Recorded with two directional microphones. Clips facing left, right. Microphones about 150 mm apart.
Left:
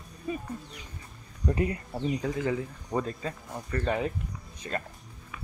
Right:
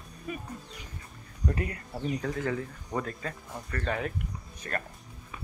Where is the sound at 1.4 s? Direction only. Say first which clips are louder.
Left 4 dB; 25° left (ahead or behind).